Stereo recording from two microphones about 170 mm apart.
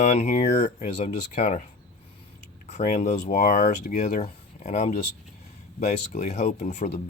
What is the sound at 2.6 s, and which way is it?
Speech, 40° left (ahead or behind).